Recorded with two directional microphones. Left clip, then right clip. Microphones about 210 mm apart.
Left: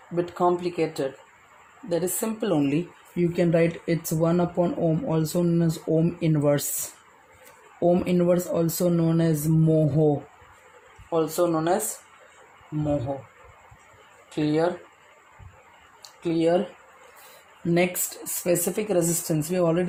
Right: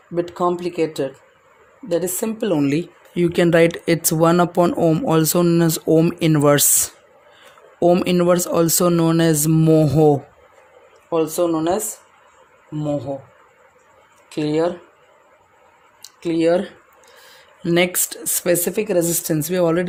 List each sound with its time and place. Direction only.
0.2 s speech: 50° right (ahead or behind)
7.8 s speech: 45° right (ahead or behind)
11.1 s speech: 50° right (ahead or behind)
14.3 s speech: 50° right (ahead or behind)
16.2 s speech: 45° right (ahead or behind)
18.4 s speech: 50° right (ahead or behind)